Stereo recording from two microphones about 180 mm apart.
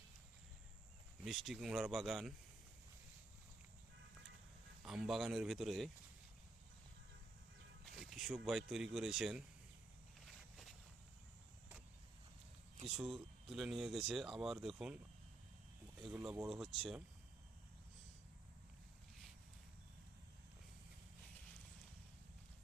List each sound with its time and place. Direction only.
1.2 s speech: centre (ahead or behind)
4.8 s speech: 5° right (ahead or behind)
7.9 s speech: centre (ahead or behind)
13.0 s speech: centre (ahead or behind)
16.0 s speech: centre (ahead or behind)